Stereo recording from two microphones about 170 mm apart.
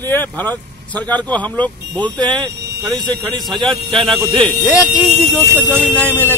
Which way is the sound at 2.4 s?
25° right (ahead or behind).